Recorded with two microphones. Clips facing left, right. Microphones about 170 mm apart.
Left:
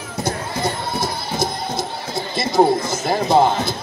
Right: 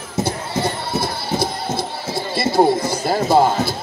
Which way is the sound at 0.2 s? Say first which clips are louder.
Right 2 dB; 25° right (ahead or behind).